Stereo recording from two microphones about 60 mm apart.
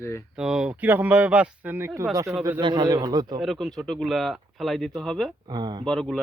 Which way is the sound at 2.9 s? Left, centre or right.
Right.